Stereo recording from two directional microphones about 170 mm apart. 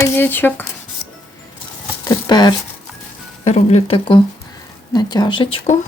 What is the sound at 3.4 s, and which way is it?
Speech, 40° left (ahead or behind).